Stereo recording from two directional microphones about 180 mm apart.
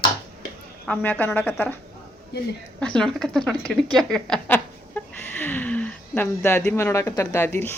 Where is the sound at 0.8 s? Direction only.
10° left (ahead or behind).